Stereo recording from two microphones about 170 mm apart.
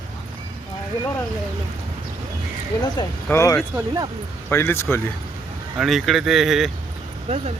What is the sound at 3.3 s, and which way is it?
Speech, 15° left (ahead or behind).